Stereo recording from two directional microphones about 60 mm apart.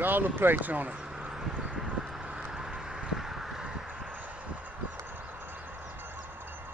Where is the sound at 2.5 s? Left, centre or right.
Centre.